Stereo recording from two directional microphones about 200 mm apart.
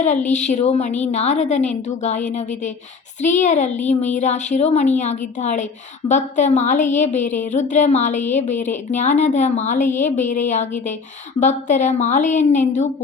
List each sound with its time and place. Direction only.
0.3 s a woman's voice: 35° left (ahead or behind)